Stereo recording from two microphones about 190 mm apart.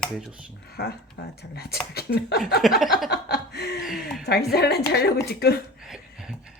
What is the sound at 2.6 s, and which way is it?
Speech, centre (ahead or behind).